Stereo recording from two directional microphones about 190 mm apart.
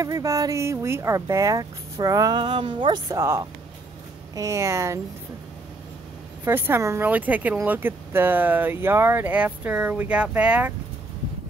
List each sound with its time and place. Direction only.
0.0 s speech: 15° right (ahead or behind)
6.4 s speech: 10° right (ahead or behind)